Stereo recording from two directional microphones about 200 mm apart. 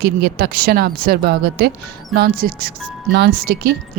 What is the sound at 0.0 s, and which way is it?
Speech, 50° right (ahead or behind).